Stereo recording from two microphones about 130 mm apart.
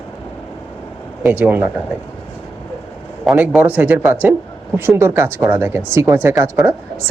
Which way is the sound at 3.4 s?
15° right (ahead or behind).